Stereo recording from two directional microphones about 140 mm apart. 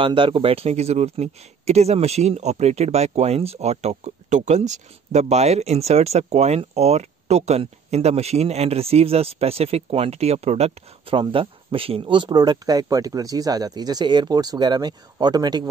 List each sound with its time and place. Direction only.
0.0 s speech: 35° right (ahead or behind)